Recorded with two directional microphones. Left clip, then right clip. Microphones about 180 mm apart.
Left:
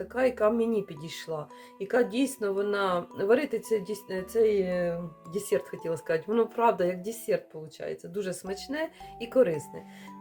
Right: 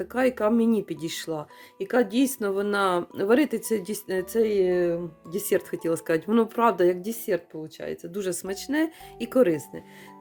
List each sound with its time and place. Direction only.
0.1 s speech: 55° right (ahead or behind)